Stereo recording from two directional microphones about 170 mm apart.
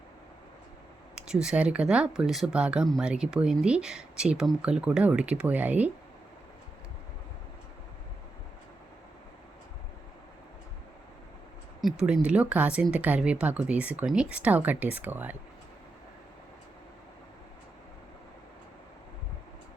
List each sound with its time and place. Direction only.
1.1 s speech: 5° right (ahead or behind)
11.8 s a woman's voice: 5° right (ahead or behind)